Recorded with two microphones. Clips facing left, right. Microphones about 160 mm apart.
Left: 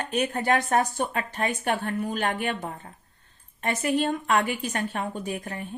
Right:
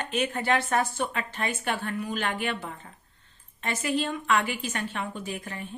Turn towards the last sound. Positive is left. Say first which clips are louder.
# left 3 dB
turn(degrees=45)  # may be behind; listen again after turning